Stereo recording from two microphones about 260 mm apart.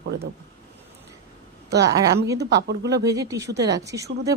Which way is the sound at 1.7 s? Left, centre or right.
Right.